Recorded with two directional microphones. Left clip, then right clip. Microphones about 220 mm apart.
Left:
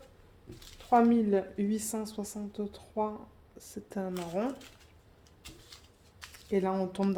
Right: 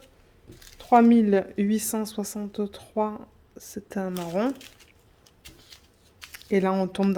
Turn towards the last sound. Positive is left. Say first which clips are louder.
# right 6 dB
turn(degrees=-40)  # may be behind; listen again after turning